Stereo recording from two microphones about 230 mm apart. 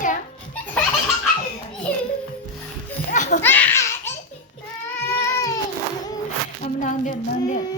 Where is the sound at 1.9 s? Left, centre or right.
Centre.